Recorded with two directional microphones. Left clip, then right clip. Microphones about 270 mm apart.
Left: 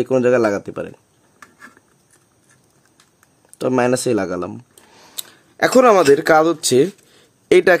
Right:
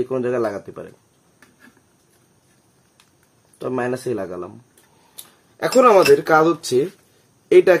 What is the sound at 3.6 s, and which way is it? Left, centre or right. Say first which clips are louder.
Speech: left 7 dB; left.